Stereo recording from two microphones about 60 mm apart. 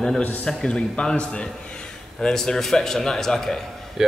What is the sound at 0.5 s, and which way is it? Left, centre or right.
A man's voice, centre.